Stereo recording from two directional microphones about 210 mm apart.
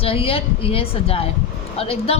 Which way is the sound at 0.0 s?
25° left (ahead or behind).